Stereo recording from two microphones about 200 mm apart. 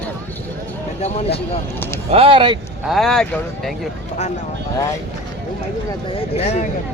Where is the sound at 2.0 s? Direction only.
30° right (ahead or behind).